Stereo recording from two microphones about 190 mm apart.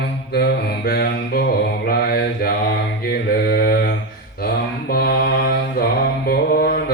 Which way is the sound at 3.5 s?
55° left (ahead or behind).